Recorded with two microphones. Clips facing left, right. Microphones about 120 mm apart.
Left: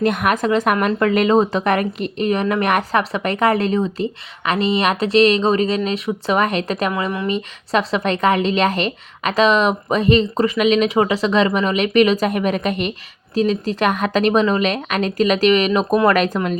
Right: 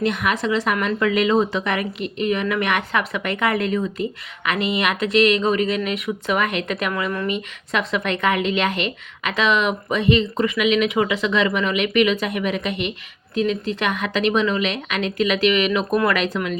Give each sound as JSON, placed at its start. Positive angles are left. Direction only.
{"t": 0.0, "sound": "a woman's voice", "side_deg": 50}